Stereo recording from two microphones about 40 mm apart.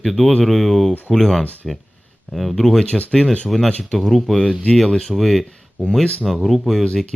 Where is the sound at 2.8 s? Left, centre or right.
Left.